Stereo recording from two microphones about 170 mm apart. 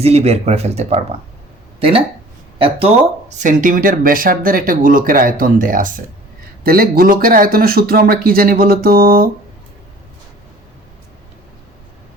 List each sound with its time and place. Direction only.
0.0 s speech: 40° right (ahead or behind); by 9.3 s 60° right (ahead or behind)